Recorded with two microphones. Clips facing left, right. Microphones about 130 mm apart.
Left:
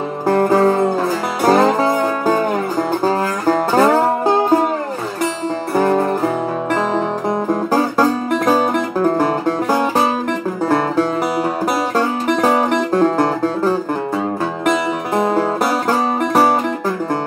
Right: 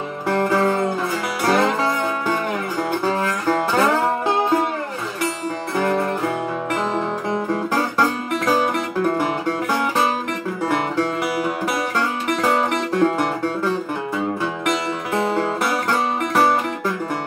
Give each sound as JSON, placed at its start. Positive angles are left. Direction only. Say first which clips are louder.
{"t": 0.3, "sound": "music", "louder": "left 5 dB", "side_deg": 40}
{"t": 5.8, "sound": "music", "louder": "left 5 dB", "side_deg": 40}
{"t": 12.0, "sound": "music", "louder": "left 6 dB", "side_deg": 40}
{"t": 15.1, "sound": "music", "louder": "left 4 dB", "side_deg": 40}